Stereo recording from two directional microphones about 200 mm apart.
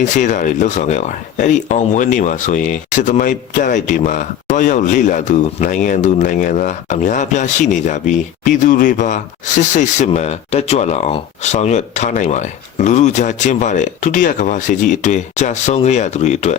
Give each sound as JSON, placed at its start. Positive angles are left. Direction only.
{"t": 0.0, "sound": "speech", "side_deg": 40}